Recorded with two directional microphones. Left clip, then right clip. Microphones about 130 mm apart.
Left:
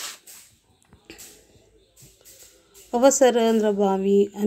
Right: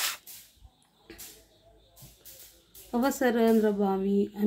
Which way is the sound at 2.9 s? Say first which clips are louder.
Left 10 dB; 20° left (ahead or behind).